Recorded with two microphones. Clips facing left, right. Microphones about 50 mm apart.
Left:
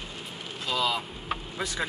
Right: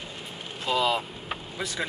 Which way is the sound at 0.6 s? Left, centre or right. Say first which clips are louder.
Right 3 dB; right.